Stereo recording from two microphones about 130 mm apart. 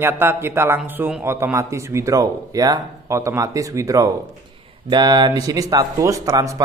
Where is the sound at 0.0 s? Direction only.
15° right (ahead or behind).